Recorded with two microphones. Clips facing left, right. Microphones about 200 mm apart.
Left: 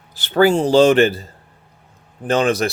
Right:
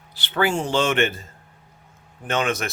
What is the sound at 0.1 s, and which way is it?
Speech, 45° left (ahead or behind).